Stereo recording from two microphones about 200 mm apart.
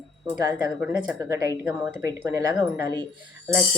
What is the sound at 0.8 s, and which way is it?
Speech, 10° right (ahead or behind).